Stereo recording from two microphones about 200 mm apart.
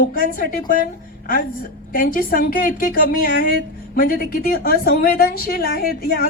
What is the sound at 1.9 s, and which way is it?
A woman's voice, 45° left (ahead or behind).